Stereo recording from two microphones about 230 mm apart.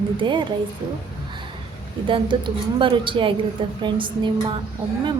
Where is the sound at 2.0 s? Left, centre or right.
Right.